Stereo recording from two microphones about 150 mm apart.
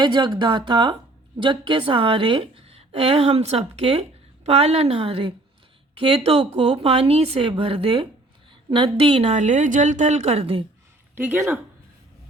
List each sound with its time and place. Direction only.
0.0 s a woman's voice: 30° right (ahead or behind)
11.1 s speech: 15° right (ahead or behind)